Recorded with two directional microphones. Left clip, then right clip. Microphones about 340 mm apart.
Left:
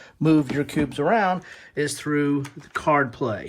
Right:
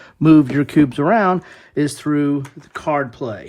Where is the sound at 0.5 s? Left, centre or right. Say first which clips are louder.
Right 8 dB; right.